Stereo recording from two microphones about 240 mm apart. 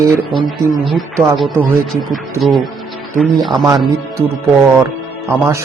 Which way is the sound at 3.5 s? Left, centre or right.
Centre.